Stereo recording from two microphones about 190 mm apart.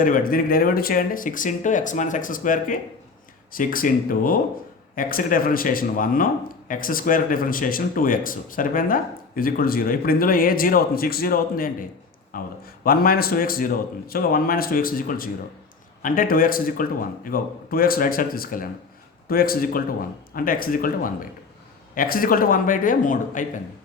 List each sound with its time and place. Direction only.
0.0 s speech: 45° left (ahead or behind)